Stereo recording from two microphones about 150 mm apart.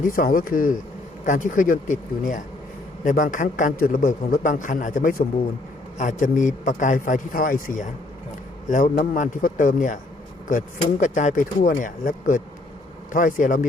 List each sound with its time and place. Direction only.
0.1 s a man's voice: 70° left (ahead or behind)